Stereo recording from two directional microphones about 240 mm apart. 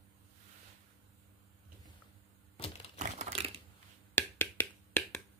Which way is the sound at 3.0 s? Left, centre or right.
Right.